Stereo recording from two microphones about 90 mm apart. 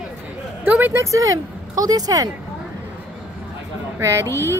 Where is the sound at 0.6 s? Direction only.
20° right (ahead or behind).